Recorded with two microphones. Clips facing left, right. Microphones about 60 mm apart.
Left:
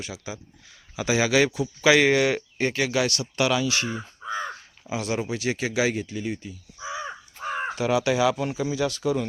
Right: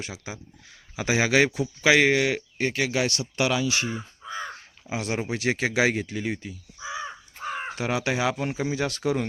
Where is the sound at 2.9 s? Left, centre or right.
Right.